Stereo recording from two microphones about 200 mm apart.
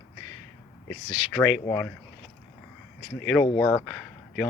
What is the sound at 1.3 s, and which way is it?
Speech, 10° left (ahead or behind).